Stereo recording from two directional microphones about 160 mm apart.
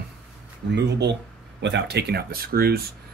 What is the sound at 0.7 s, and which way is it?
Speech, 90° right.